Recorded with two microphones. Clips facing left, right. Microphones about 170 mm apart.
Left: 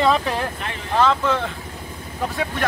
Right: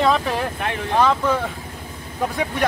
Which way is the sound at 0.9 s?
10° right (ahead or behind).